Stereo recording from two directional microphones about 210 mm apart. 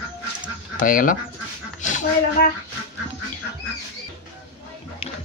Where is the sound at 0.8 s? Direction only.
40° left (ahead or behind).